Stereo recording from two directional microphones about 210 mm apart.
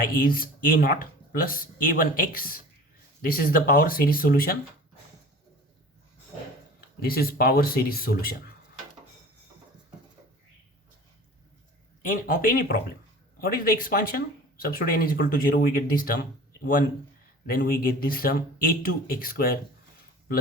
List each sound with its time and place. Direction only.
0.1 s speech: 45° left (ahead or behind)
7.0 s speech: 45° left (ahead or behind)
12.0 s speech: 40° left (ahead or behind)